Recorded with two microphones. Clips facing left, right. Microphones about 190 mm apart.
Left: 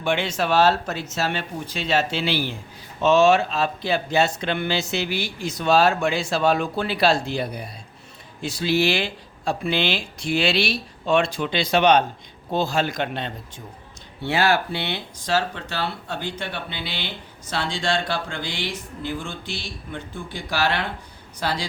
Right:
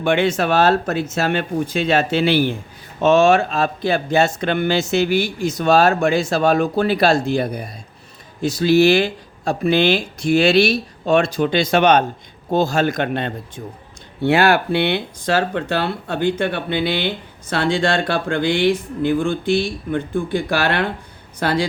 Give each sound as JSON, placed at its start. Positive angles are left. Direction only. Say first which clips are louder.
{"t": 0.0, "sound": "speech", "louder": "right 6 dB", "side_deg": -55}